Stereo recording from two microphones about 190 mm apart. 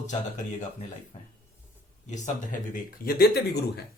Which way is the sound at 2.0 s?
40° left (ahead or behind).